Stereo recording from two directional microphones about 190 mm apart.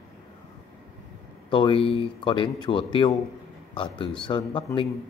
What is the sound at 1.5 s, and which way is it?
A man's voice, 25° left (ahead or behind).